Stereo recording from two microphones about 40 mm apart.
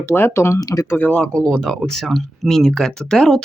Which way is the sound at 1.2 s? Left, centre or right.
Centre.